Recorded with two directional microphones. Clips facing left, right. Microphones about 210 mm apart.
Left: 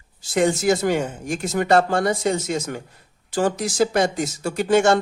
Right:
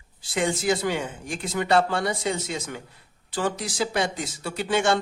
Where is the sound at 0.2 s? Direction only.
45° left (ahead or behind).